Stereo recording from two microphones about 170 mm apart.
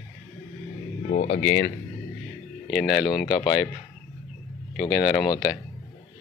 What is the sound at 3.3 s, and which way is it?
Speech, 25° left (ahead or behind).